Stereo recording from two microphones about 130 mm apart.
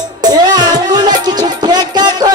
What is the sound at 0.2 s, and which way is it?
Music, 30° right (ahead or behind).